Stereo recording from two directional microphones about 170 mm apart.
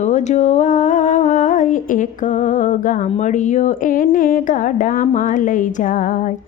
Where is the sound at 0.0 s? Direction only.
45° left (ahead or behind).